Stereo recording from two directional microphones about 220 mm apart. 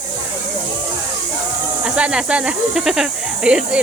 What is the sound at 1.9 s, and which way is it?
Speech, 5° right (ahead or behind).